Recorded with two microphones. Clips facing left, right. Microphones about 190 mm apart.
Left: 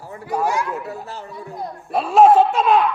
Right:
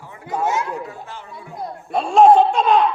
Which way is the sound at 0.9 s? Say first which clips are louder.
Left 4 dB; 40° left (ahead or behind).